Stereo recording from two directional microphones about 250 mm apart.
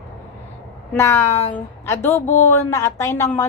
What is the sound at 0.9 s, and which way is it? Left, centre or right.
A woman's voice, centre.